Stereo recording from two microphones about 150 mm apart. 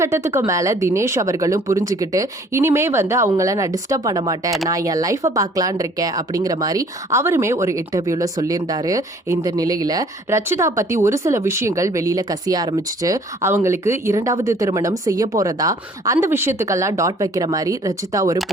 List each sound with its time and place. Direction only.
0.0 s speech: 15° right (ahead or behind)